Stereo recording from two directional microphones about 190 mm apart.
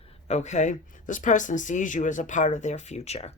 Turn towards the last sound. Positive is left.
turn(degrees=35)  # may be behind; listen again after turning